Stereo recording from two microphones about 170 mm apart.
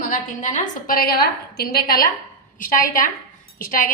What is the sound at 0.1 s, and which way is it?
A woman's voice, 50° left (ahead or behind).